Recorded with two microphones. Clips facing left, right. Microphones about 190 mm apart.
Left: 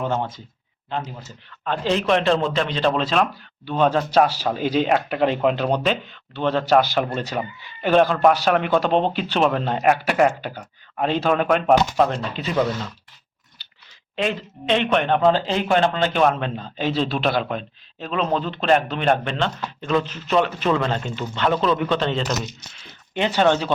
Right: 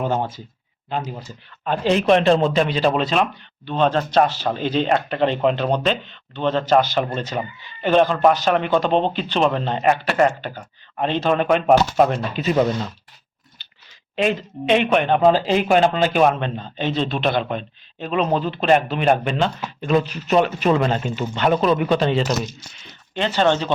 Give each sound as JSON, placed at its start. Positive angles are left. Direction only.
{"t": 0.0, "sound": "a man's voice", "side_deg": -10}
{"t": 3.7, "sound": "speech", "side_deg": 10}
{"t": 11.9, "sound": "speech", "side_deg": -15}
{"t": 14.2, "sound": "a man's voice", "side_deg": -15}
{"t": 23.1, "sound": "speech", "side_deg": 15}